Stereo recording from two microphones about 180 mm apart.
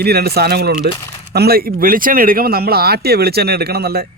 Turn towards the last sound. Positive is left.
turn(degrees=-60)  # may be behind; listen again after turning